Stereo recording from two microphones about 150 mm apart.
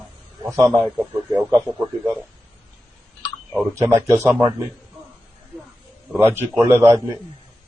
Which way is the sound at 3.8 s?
20° right (ahead or behind).